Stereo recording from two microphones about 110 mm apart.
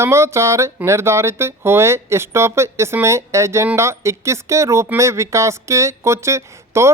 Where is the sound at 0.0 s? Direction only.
25° right (ahead or behind).